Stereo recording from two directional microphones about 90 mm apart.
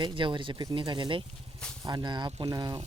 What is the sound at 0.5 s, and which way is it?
Speech, 45° right (ahead or behind).